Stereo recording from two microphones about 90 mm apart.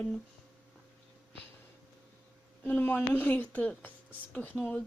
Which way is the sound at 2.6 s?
20° left (ahead or behind).